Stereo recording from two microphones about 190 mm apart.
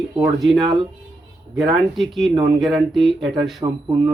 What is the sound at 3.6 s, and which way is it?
Speech, 20° right (ahead or behind).